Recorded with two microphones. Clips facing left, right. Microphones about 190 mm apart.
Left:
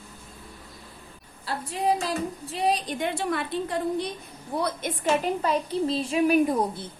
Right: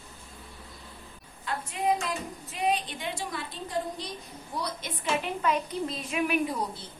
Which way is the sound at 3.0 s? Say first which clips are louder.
Left 8 dB; 60° left (ahead or behind).